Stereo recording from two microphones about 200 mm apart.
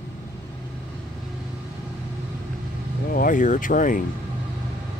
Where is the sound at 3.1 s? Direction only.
45° left (ahead or behind).